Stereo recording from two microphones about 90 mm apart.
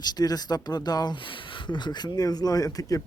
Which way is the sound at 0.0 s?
50° left (ahead or behind).